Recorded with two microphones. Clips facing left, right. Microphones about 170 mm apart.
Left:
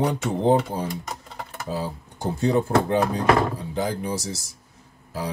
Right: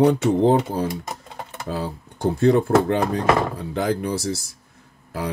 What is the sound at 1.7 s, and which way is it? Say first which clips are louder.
Speech: right 1 dB; 65° right (ahead or behind).